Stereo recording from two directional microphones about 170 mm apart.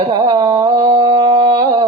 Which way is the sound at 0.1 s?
25° right (ahead or behind).